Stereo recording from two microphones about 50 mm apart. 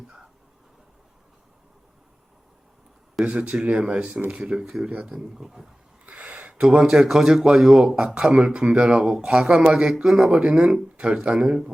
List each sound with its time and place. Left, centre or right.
3.2 s a man's voice: right
6.1 s a man's voice: right